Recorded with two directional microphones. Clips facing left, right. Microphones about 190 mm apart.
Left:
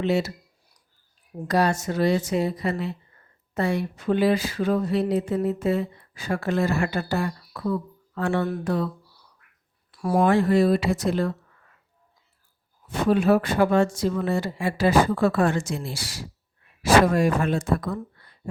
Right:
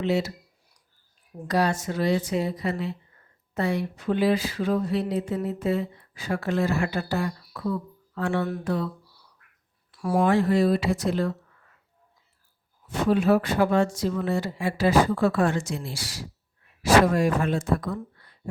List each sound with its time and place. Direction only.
0.0 s speech: 50° left (ahead or behind)
1.5 s speech: 45° left (ahead or behind)
10.0 s speech: 40° left (ahead or behind)
10.2 s speech: 60° left (ahead or behind)
13.1 s speech: 50° left (ahead or behind)